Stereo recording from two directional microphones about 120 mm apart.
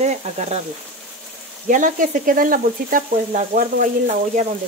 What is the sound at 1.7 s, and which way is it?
Speech, 90° right.